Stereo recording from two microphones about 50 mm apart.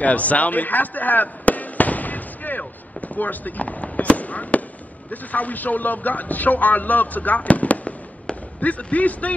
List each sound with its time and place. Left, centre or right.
0.0 s fireworks: left
5.1 s speech: left